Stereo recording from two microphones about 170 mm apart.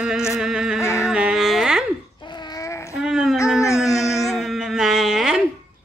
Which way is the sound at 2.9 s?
5° right (ahead or behind).